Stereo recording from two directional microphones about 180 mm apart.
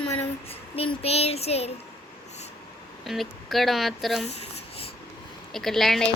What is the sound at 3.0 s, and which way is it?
Speech, centre (ahead or behind).